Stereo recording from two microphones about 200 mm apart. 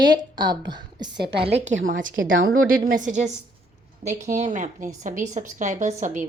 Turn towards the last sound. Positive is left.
turn(degrees=-35)  # may be behind; listen again after turning